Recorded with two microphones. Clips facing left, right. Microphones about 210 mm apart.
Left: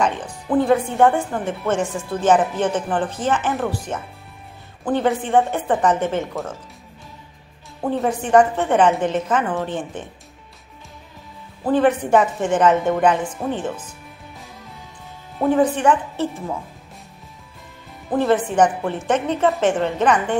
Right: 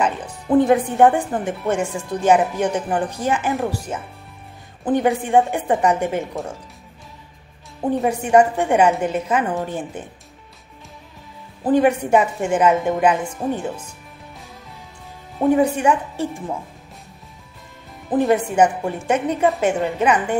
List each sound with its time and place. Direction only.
0.0 s speech: 5° right (ahead or behind)
0.5 s a woman's voice: 20° right (ahead or behind)
7.8 s a woman's voice: 15° right (ahead or behind)
11.6 s a woman's voice: 15° right (ahead or behind)
15.5 s a woman's voice: 10° right (ahead or behind)
18.1 s a woman's voice: 15° right (ahead or behind)